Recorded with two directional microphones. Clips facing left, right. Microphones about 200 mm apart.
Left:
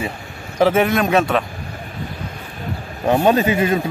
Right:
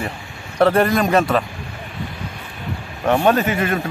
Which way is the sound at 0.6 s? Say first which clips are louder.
Even; centre (ahead or behind).